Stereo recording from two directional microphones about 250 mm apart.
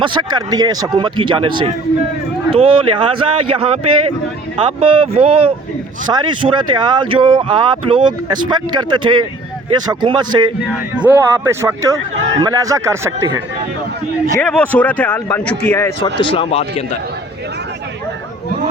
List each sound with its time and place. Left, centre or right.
0.0 s speech: centre
10.7 s speech: centre
14.4 s a man's voice: centre; by 16.8 s left